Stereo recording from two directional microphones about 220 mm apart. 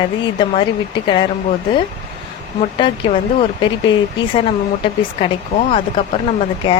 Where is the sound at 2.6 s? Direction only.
20° left (ahead or behind).